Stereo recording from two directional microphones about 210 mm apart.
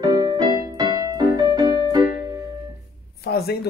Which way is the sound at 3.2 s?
50° left (ahead or behind).